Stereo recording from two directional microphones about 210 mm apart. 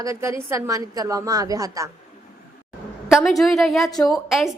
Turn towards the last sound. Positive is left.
turn(degrees=0)  # may be behind; listen again after turning